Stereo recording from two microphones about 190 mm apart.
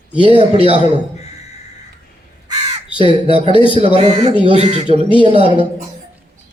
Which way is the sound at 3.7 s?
30° right (ahead or behind).